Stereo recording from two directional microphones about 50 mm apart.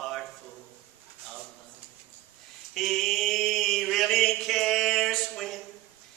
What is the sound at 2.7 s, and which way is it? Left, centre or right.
Mantra, centre.